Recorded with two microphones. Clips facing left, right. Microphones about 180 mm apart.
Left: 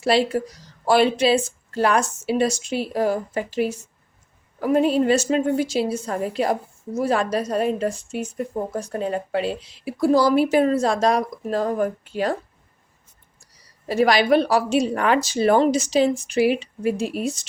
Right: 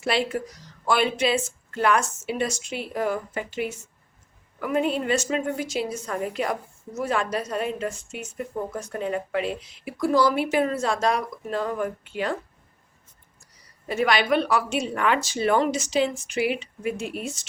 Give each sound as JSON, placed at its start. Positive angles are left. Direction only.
{"t": 0.0, "sound": "a woman's voice", "side_deg": 35}
{"t": 13.8, "sound": "a woman's voice", "side_deg": 35}